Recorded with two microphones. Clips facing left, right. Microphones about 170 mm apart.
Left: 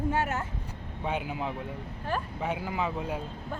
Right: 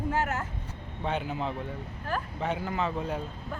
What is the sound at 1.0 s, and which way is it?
Speech, 10° left (ahead or behind).